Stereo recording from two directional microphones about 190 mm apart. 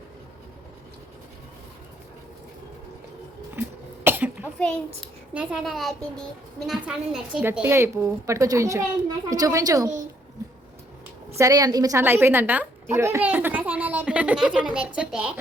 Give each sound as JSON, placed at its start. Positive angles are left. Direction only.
{"t": 3.5, "sound": "cough", "side_deg": -10}
{"t": 4.9, "sound": "a child's voice", "side_deg": -5}
{"t": 11.3, "sound": "a woman's voice", "side_deg": -20}